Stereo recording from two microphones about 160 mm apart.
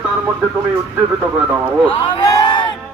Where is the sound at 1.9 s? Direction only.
30° left (ahead or behind).